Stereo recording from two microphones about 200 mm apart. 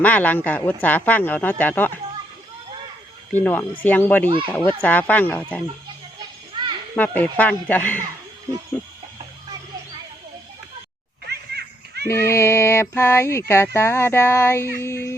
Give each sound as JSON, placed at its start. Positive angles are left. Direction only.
{"t": 0.0, "sound": "speech", "side_deg": 10}
{"t": 3.3, "sound": "speech", "side_deg": 10}
{"t": 6.9, "sound": "speech", "side_deg": 10}
{"t": 11.3, "sound": "music", "side_deg": -55}
{"t": 12.0, "sound": "speech", "side_deg": 15}